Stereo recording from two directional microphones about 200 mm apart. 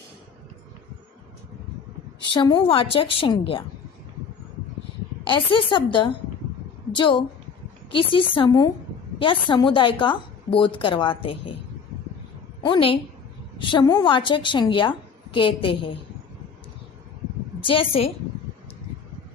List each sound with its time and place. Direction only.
2.3 s a woman's voice: 25° left (ahead or behind)
5.2 s a woman's voice: 25° left (ahead or behind)
12.6 s a woman's voice: 25° left (ahead or behind)
17.6 s a woman's voice: 25° left (ahead or behind)